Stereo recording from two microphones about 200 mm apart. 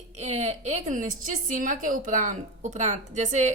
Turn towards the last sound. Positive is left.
turn(degrees=-35)  # may be behind; listen again after turning